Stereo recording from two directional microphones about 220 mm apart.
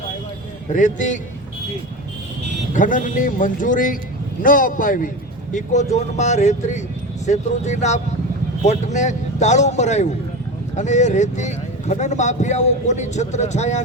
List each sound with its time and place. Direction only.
0.7 s speech: 35° left (ahead or behind)
2.7 s speech: 35° left (ahead or behind)